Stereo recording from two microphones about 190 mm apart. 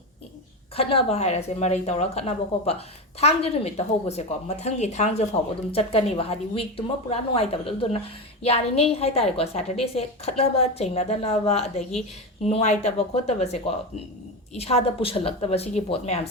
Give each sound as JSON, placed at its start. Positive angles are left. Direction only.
{"t": 0.8, "sound": "a woman's voice", "side_deg": 30}